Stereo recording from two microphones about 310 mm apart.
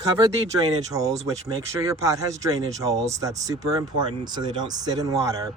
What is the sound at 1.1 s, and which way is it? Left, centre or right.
Speech, right.